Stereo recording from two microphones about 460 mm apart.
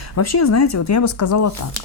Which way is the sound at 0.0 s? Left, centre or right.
Left.